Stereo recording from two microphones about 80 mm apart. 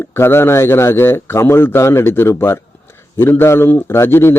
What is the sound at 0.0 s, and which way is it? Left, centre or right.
A man's voice, left.